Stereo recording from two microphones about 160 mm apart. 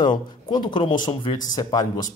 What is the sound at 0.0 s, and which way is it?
Speech, 30° left (ahead or behind).